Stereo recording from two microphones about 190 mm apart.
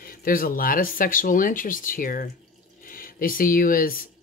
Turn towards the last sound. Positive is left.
turn(degrees=50)  # may be behind; listen again after turning